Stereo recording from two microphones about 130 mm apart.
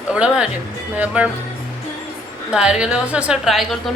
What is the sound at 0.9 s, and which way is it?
Speech, 10° right (ahead or behind).